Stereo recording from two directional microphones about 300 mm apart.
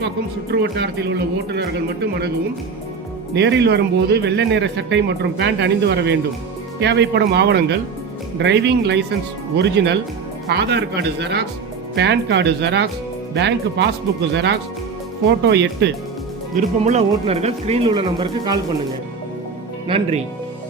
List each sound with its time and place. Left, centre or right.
0.5 s speech: right
3.3 s speech: right
16.6 s speech: right
19.9 s speech: right